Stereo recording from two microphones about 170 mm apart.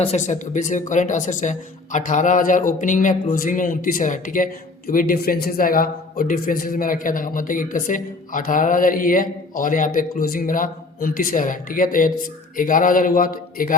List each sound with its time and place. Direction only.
0.0 s a man's voice: 40° left (ahead or behind)